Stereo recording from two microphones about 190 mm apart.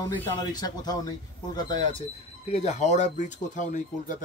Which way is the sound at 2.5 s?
35° left (ahead or behind).